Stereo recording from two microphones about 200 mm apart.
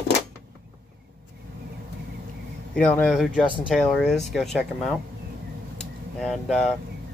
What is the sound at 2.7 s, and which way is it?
Speech, 5° left (ahead or behind).